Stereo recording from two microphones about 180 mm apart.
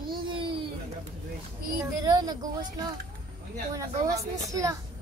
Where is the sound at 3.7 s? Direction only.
20° right (ahead or behind).